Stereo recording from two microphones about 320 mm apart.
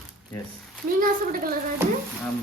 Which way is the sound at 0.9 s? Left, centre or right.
Right.